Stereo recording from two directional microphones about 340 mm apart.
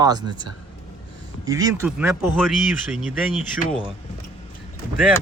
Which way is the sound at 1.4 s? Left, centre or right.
Centre.